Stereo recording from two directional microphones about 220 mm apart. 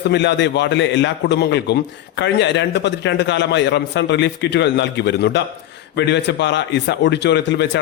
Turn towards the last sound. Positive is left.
turn(degrees=50)  # may be behind; listen again after turning